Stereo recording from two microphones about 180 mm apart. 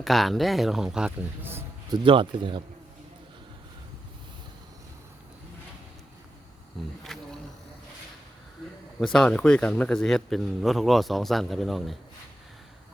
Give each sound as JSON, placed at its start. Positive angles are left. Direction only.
{"t": 0.0, "sound": "speech", "side_deg": 0}
{"t": 2.0, "sound": "a man's voice", "side_deg": -30}
{"t": 7.0, "sound": "wild animals", "side_deg": 0}
{"t": 9.1, "sound": "speech", "side_deg": 5}